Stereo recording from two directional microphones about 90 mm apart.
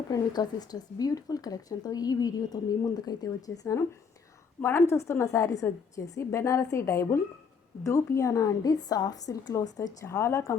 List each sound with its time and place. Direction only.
0.1 s a woman's voice: 45° left (ahead or behind)